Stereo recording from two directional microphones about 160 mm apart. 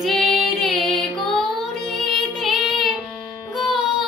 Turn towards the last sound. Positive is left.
turn(degrees=0)  # may be behind; listen again after turning